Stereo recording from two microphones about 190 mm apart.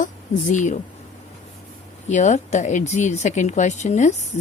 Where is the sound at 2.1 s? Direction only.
40° left (ahead or behind).